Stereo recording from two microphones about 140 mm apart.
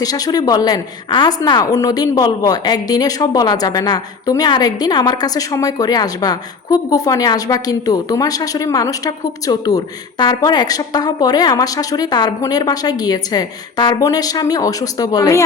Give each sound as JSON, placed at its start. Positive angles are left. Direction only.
{"t": 0.0, "sound": "a woman's voice", "side_deg": 25}